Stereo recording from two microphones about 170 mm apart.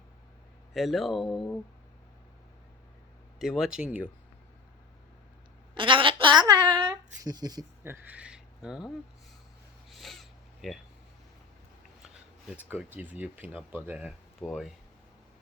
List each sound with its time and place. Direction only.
0.7 s speech: centre (ahead or behind)
3.3 s speech: centre (ahead or behind)
5.7 s a sound: 30° right (ahead or behind)
7.2 s speech: 20° right (ahead or behind)
8.0 s speech: 5° right (ahead or behind)
9.9 s a sound: centre (ahead or behind)
12.0 s speech: 5° right (ahead or behind)